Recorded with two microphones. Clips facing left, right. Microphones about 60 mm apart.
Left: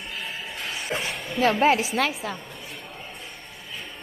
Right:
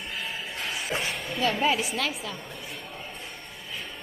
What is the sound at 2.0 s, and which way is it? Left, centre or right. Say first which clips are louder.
Speech: left 5 dB; left.